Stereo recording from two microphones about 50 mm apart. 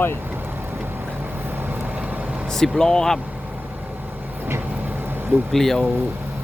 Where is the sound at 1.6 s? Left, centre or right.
Right.